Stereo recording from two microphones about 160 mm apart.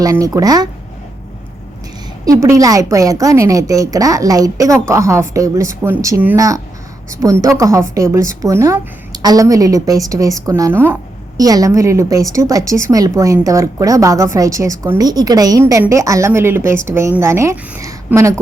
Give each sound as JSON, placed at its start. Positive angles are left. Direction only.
{"t": 0.0, "sound": "a woman's voice", "side_deg": -20}
{"t": 2.2, "sound": "a woman's voice", "side_deg": -20}